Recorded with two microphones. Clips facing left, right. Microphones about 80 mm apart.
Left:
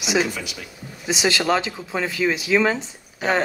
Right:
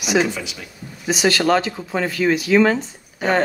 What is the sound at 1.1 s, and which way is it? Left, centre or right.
Speech, centre.